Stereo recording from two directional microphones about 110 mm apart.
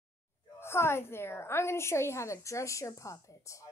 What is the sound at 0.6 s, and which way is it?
A woman's voice, 20° left (ahead or behind).